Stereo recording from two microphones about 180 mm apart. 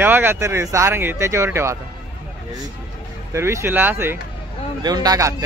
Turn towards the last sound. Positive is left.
turn(degrees=-20)  # may be behind; listen again after turning